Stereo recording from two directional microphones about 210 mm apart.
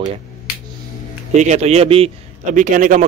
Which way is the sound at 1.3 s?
35° right (ahead or behind).